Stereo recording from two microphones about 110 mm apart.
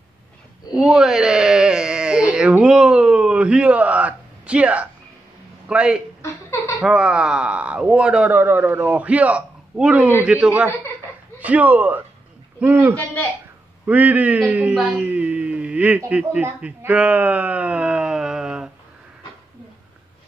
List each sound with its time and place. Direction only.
0.7 s a sound: 5° right (ahead or behind)
5.7 s a man's voice: 10° right (ahead or behind)
12.9 s a man's voice: 15° left (ahead or behind)
13.8 s a man's voice: 15° right (ahead or behind)